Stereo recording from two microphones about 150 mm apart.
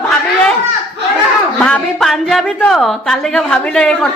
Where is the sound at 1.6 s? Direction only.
5° left (ahead or behind).